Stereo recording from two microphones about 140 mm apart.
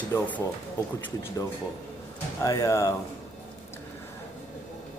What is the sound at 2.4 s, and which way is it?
Speech, 25° left (ahead or behind).